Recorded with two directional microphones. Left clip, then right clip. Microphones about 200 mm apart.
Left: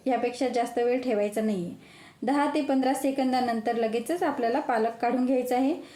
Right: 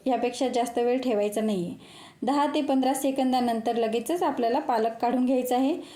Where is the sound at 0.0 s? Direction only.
20° right (ahead or behind).